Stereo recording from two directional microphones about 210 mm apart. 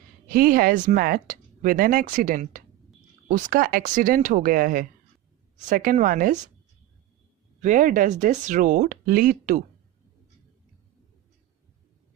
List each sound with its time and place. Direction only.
0.3 s speech: 45° right (ahead or behind)
7.6 s speech: 40° right (ahead or behind)